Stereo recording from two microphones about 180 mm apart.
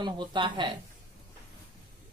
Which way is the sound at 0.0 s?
25° right (ahead or behind).